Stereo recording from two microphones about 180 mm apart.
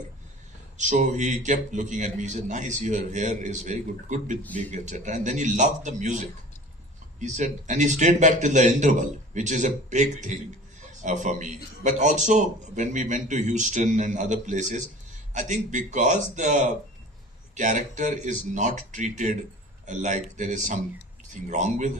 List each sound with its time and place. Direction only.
0.8 s a man's voice: 40° right (ahead or behind)